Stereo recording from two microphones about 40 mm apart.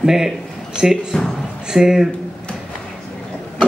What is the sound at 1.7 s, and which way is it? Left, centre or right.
Speech, centre.